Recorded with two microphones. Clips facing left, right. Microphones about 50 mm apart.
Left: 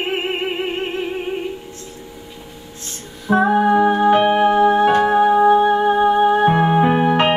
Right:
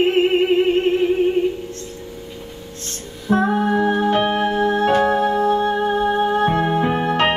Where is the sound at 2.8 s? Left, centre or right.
Centre.